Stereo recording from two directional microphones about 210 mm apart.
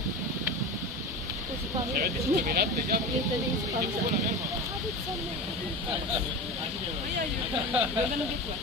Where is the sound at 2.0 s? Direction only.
45° right (ahead or behind).